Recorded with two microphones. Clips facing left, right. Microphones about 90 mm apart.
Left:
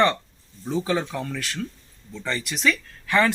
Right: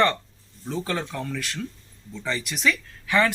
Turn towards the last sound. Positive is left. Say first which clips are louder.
# left 1 dB
turn(degrees=0)  # may be behind; listen again after turning